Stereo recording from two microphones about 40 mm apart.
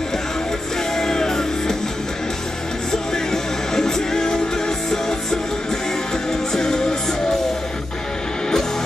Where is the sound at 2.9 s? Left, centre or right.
Centre.